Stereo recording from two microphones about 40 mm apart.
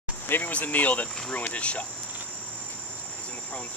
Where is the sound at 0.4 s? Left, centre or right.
Left.